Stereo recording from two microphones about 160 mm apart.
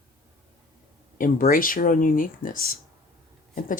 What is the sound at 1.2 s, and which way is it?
Speech, 60° left (ahead or behind).